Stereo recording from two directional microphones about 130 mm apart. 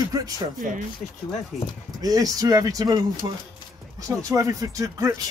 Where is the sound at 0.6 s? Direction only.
90° right.